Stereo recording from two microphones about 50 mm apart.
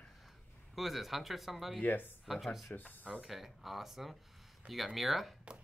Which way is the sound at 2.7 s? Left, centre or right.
Left.